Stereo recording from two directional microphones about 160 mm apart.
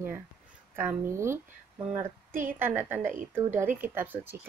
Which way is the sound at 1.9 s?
50° right (ahead or behind).